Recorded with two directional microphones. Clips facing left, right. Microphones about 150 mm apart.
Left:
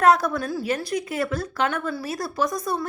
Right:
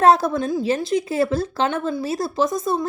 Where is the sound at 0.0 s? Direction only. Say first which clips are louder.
Right 3 dB; 30° right (ahead or behind).